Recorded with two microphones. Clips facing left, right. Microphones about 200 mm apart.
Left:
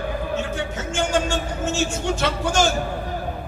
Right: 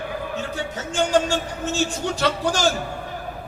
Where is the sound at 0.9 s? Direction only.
35° right (ahead or behind).